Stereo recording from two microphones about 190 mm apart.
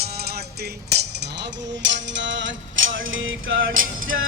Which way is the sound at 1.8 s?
70° right (ahead or behind).